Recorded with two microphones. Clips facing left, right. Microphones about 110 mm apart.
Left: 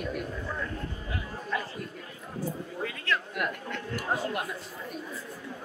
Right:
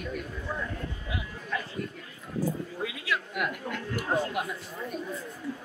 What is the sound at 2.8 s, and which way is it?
Speech, 5° right (ahead or behind).